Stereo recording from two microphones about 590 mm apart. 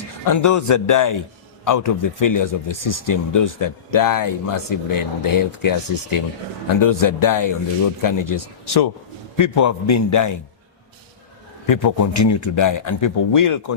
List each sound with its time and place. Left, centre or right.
0.3 s a man's voice: left
11.6 s speech: left